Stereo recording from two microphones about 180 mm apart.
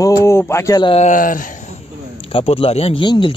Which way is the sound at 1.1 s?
50° left (ahead or behind).